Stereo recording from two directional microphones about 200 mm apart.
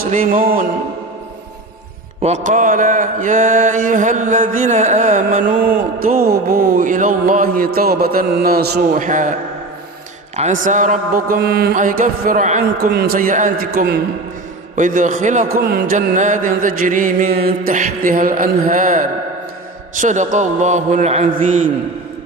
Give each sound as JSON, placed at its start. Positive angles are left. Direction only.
{"t": 0.0, "sound": "mantra", "side_deg": -45}
{"t": 2.2, "sound": "mantra", "side_deg": -35}
{"t": 8.9, "sound": "mantra", "side_deg": -40}
{"t": 10.3, "sound": "mantra", "side_deg": -40}
{"t": 12.9, "sound": "mantra", "side_deg": -50}
{"t": 13.7, "sound": "mantra", "side_deg": -55}
{"t": 14.8, "sound": "mantra", "side_deg": -40}